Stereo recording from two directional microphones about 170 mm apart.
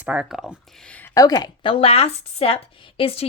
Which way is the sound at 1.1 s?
25° left (ahead or behind).